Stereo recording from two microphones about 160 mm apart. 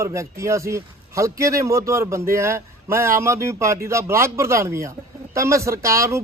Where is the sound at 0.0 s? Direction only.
20° right (ahead or behind).